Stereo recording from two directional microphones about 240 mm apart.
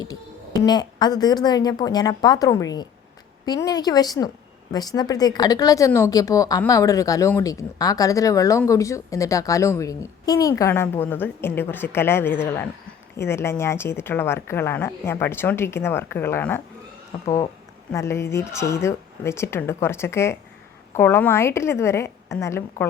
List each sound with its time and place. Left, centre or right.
0.6 s speech: centre